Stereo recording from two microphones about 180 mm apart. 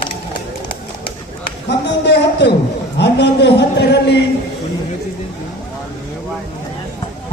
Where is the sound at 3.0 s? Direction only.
65° left (ahead or behind).